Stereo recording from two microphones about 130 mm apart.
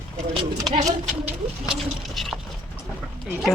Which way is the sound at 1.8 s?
Centre (ahead or behind).